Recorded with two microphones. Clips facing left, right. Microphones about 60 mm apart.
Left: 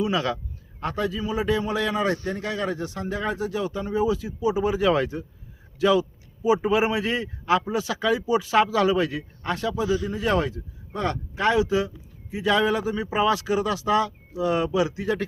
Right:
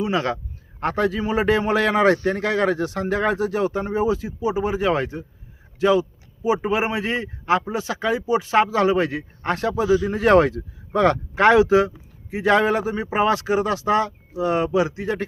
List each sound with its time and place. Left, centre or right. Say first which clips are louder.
0.0 s a man's voice: right 2 dB; right
0.8 s speech: right 5 dB; right
12.3 s speech: right 4 dB; right